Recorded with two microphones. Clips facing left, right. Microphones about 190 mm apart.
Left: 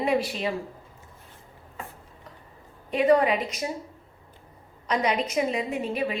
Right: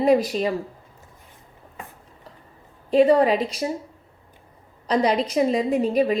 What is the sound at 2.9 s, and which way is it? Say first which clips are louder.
Speech: right 4 dB; 30° right (ahead or behind).